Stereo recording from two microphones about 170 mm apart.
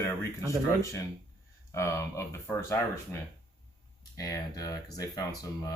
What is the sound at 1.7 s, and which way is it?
Speech, 15° left (ahead or behind).